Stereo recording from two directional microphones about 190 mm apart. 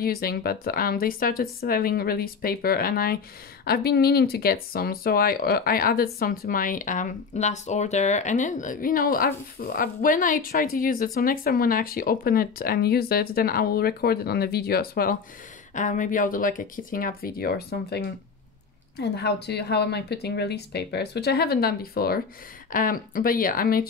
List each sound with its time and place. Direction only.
0.0 s a woman's voice: 55° left (ahead or behind)